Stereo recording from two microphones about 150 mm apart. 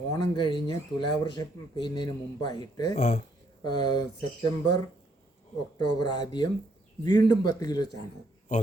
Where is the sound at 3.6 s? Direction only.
25° left (ahead or behind).